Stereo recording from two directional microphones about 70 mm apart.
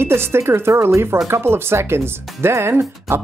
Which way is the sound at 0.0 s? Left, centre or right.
Right.